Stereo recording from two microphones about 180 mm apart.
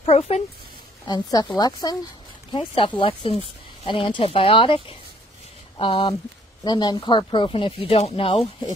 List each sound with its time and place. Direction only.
0.0 s speech: 35° left (ahead or behind)
1.0 s speech: 20° left (ahead or behind)